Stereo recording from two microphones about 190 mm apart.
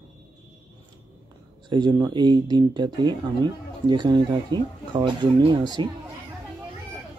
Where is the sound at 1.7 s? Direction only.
25° right (ahead or behind).